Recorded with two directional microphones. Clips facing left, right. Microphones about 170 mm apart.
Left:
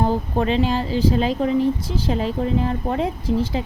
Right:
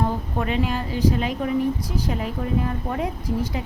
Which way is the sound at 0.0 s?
30° left (ahead or behind).